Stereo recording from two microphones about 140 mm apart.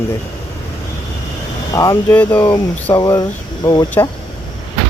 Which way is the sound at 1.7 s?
25° left (ahead or behind).